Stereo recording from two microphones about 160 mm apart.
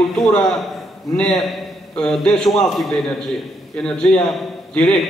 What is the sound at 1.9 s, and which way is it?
A man's voice, 5° left (ahead or behind).